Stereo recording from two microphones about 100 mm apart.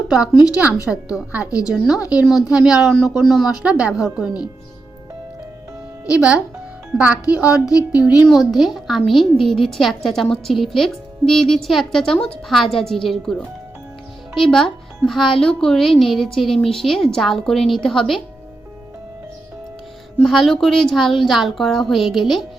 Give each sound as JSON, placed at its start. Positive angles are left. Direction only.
{"t": 0.2, "sound": "a woman's voice", "side_deg": 40}
{"t": 0.5, "sound": "speech", "side_deg": -10}
{"t": 6.1, "sound": "speech", "side_deg": -10}
{"t": 8.3, "sound": "a woman's voice", "side_deg": 0}
{"t": 20.2, "sound": "a woman's voice", "side_deg": 0}